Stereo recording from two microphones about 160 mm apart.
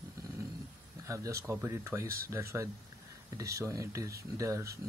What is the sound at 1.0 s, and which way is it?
Speech, 20° right (ahead or behind).